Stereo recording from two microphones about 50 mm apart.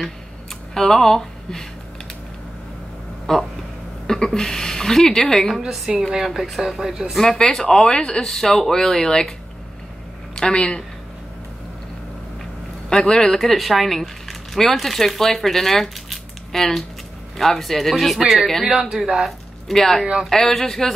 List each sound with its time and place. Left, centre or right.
0.7 s speech: centre
3.3 s a woman's voice: centre
5.6 s speech: centre
7.2 s speech: centre
10.3 s speech: centre
12.9 s speech: centre
19.7 s speech: centre